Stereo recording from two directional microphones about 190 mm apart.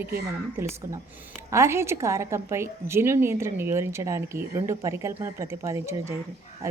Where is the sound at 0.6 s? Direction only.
15° right (ahead or behind).